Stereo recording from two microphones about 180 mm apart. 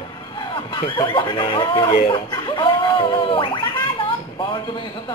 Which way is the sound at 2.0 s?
25° left (ahead or behind).